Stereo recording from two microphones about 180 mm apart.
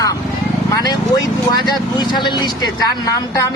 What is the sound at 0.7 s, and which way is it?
A woman's voice, 20° left (ahead or behind).